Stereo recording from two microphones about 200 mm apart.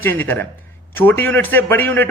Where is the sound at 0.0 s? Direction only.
10° left (ahead or behind).